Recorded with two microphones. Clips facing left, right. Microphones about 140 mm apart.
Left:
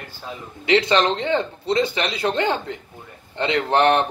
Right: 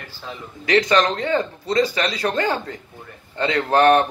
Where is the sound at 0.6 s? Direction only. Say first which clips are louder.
Even; 25° left (ahead or behind).